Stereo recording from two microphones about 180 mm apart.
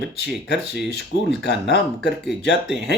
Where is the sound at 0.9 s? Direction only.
70° left (ahead or behind).